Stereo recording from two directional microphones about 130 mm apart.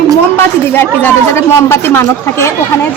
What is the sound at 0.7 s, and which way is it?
Speech, 15° left (ahead or behind).